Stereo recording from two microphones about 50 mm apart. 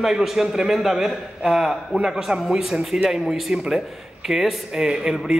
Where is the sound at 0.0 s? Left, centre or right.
Centre.